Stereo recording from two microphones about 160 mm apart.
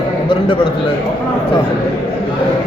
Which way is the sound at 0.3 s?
35° left (ahead or behind).